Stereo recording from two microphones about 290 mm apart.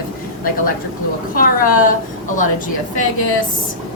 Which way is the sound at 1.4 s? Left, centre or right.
Left.